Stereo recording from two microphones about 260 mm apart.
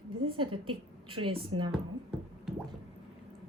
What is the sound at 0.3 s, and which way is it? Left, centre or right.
Speech, centre.